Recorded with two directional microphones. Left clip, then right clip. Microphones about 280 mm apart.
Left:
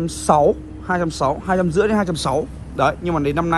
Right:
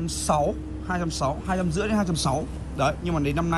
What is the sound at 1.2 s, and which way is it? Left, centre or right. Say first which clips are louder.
Speech: left 7 dB; left.